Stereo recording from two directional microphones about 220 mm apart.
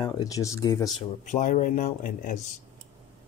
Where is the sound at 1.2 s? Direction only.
35° left (ahead or behind).